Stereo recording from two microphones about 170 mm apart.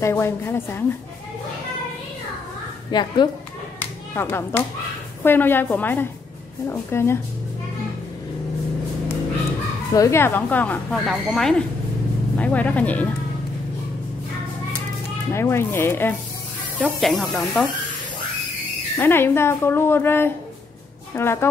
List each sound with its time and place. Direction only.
0.0 s speech: 15° left (ahead or behind)
2.9 s speech: 25° left (ahead or behind)
3.8 s speech: 10° left (ahead or behind)
9.9 s speech: 15° left (ahead or behind)
15.3 s speech: 15° left (ahead or behind)
16.8 s speech: centre (ahead or behind)
18.9 s speech: 15° left (ahead or behind)